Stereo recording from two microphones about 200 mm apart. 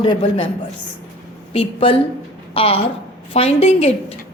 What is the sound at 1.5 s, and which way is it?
A woman's voice, 25° left (ahead or behind).